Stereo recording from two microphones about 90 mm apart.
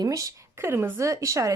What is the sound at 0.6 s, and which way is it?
Speech, 25° right (ahead or behind).